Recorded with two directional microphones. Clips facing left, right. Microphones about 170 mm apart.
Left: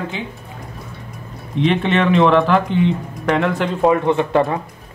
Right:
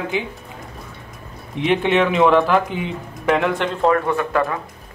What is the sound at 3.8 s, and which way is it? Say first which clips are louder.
Speech: left 4 dB; 20° left (ahead or behind).